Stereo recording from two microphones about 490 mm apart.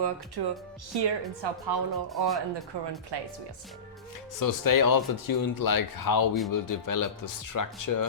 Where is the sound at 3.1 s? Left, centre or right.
Right.